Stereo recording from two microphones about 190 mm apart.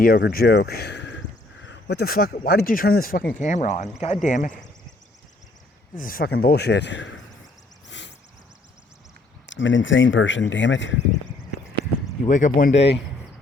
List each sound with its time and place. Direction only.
0.0 s speech: 55° left (ahead or behind)
6.0 s speech: 50° left (ahead or behind); by 7.1 s 70° left (ahead or behind)
7.9 s a sound: 70° left (ahead or behind)
9.5 s speech: 80° left
12.2 s speech: 40° left (ahead or behind)